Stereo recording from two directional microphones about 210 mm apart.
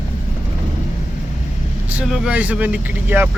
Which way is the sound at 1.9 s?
5° right (ahead or behind).